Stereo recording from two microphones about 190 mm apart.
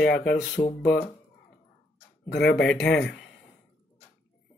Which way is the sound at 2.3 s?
60° left (ahead or behind).